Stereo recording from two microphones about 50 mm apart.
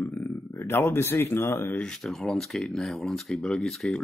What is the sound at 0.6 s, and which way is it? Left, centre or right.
Speech, left.